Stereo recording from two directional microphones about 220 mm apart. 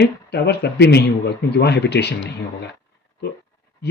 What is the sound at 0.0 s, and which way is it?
Speech, 50° left (ahead or behind).